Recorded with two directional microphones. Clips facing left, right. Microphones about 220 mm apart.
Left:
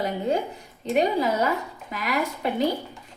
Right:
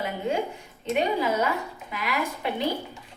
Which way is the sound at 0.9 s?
40° left (ahead or behind).